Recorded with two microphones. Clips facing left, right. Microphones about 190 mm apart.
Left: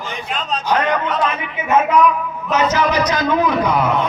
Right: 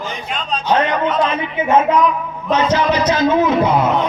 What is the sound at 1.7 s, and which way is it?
A man's voice, 30° right (ahead or behind).